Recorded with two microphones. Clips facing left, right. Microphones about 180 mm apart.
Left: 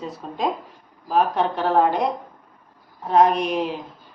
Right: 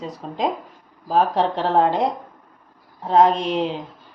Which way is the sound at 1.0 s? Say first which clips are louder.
Right 1 dB; 30° right (ahead or behind).